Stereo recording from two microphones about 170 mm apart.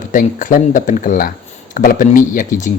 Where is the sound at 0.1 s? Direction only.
50° left (ahead or behind).